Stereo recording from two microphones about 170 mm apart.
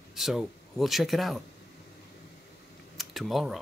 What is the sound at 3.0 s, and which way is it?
Speech, centre (ahead or behind).